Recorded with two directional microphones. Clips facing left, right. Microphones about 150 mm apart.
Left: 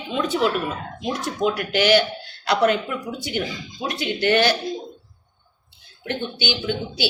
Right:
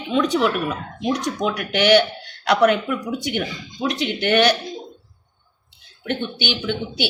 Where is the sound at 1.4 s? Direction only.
65° right (ahead or behind).